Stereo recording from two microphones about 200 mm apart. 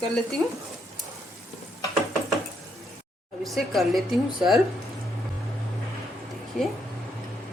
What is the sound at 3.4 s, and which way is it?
Speech, centre (ahead or behind).